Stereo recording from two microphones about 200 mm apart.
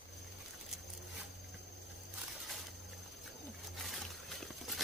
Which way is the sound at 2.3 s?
Centre (ahead or behind).